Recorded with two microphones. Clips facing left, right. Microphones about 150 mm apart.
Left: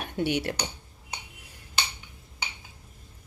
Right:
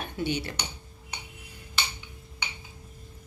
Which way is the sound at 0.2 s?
75° left (ahead or behind).